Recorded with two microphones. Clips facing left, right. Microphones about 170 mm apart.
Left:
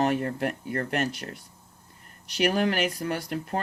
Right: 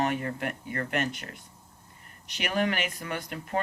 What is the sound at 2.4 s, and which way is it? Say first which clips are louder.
Speech: left 4 dB; 35° left (ahead or behind).